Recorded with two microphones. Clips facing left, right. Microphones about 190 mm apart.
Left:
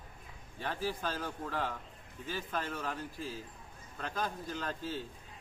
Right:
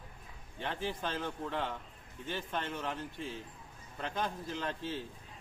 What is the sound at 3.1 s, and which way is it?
Speech, 5° left (ahead or behind).